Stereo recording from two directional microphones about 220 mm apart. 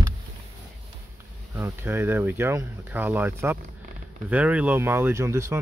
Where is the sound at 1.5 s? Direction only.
10° right (ahead or behind).